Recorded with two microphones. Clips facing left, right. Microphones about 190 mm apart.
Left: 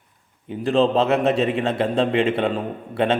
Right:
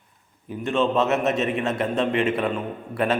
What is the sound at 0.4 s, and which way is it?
A man's voice, 30° left (ahead or behind).